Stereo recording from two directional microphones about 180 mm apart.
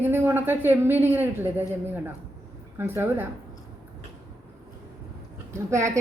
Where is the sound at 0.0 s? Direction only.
10° right (ahead or behind).